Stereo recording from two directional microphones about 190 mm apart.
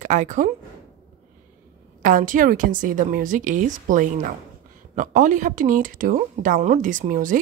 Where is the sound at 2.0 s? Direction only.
45° right (ahead or behind).